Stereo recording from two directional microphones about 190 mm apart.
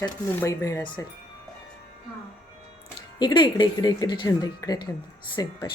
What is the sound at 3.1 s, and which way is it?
Speech, 25° left (ahead or behind).